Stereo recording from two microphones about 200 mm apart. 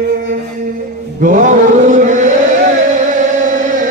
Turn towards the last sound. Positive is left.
turn(degrees=-40)  # may be behind; listen again after turning